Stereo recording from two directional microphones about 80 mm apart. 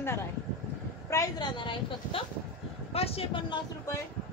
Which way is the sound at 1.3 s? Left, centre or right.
Left.